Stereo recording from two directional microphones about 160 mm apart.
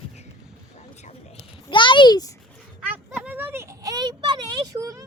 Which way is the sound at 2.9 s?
10° right (ahead or behind).